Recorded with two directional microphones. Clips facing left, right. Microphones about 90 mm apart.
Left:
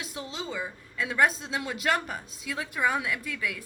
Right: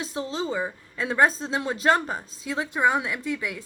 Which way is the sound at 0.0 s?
30° right (ahead or behind).